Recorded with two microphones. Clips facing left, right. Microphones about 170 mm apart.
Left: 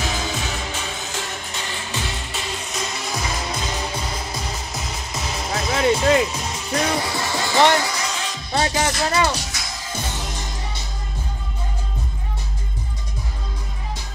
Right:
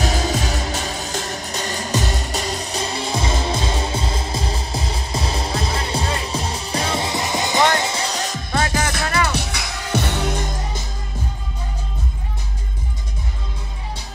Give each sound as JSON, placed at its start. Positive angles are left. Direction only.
{"t": 0.0, "sound": "music", "side_deg": -35}
{"t": 8.5, "sound": "music", "side_deg": 20}
{"t": 9.3, "sound": "music", "side_deg": -60}